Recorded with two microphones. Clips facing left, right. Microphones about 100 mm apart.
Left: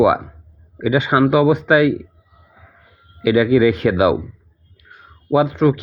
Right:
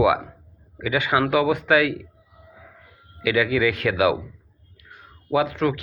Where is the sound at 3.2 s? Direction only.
30° left (ahead or behind).